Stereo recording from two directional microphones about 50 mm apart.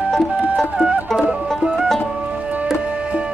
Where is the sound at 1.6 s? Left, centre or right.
Centre.